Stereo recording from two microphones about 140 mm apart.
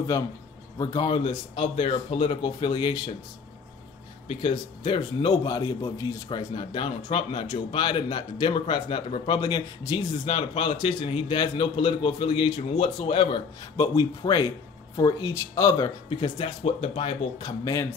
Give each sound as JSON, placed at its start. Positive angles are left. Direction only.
{"t": 0.7, "sound": "speech", "side_deg": 30}
{"t": 4.3, "sound": "speech", "side_deg": 35}
{"t": 6.2, "sound": "speech", "side_deg": 35}
{"t": 9.4, "sound": "speech", "side_deg": 30}
{"t": 13.7, "sound": "speech", "side_deg": 25}
{"t": 16.1, "sound": "speech", "side_deg": 35}
{"t": 17.4, "sound": "speech", "side_deg": 25}